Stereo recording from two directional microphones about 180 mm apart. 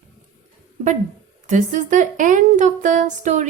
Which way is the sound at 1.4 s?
45° right (ahead or behind).